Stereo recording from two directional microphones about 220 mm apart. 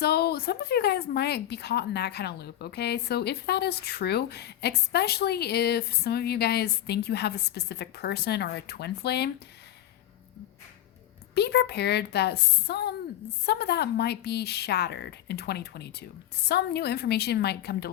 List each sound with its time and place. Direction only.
0.0 s speech: 45° left (ahead or behind)
11.3 s speech: 50° left (ahead or behind)